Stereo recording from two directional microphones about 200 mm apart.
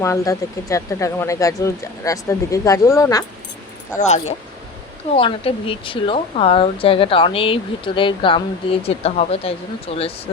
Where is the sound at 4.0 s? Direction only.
35° left (ahead or behind).